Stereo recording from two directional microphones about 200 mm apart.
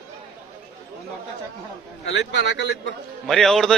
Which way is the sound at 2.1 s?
60° left (ahead or behind).